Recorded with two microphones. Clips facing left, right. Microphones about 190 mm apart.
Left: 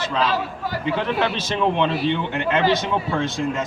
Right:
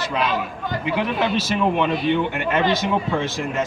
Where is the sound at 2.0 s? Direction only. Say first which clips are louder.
Right 2 dB; 25° left (ahead or behind).